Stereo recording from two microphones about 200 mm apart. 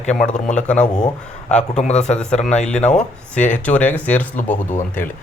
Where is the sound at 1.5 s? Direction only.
5° left (ahead or behind).